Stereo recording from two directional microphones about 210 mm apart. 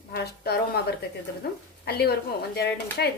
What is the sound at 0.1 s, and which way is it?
A woman's voice, 50° left (ahead or behind).